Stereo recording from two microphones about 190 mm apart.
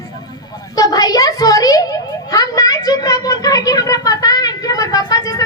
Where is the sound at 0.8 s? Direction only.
20° left (ahead or behind).